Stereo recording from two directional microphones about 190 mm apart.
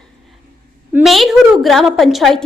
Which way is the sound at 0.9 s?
Centre (ahead or behind).